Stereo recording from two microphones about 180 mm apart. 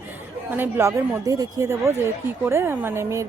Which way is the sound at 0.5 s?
10° right (ahead or behind).